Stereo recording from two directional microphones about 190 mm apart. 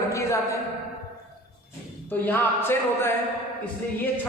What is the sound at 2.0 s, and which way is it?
A man's voice, 10° left (ahead or behind).